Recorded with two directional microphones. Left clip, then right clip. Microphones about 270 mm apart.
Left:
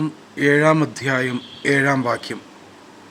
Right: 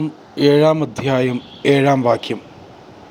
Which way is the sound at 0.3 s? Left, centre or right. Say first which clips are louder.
Right 3 dB; centre.